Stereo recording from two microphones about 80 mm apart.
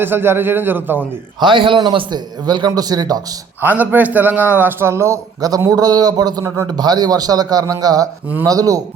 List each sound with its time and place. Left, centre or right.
0.0 s a man's voice: right
1.4 s a man's voice: right
3.6 s a man's voice: right